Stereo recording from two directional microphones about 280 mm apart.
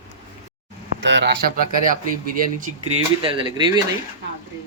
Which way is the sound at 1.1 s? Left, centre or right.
Right.